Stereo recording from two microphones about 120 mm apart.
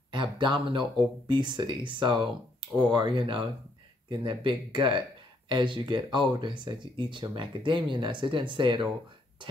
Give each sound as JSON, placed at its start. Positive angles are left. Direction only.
{"t": 0.1, "sound": "speech", "side_deg": -40}